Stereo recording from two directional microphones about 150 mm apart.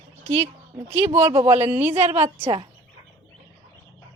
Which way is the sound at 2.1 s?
40° right (ahead or behind).